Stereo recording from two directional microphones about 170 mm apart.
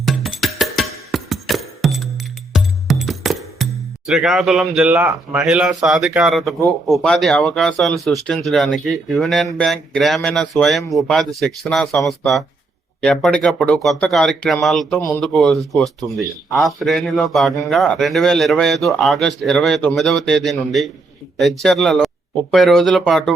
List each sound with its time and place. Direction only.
0.0 s music: centre (ahead or behind)
6.8 s a man's voice: centre (ahead or behind)